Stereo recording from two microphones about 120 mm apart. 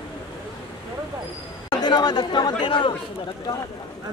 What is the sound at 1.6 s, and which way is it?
Speech, 35° left (ahead or behind).